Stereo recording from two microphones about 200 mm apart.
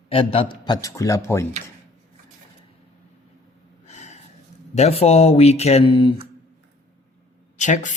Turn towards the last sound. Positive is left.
turn(degrees=40)  # may be behind; listen again after turning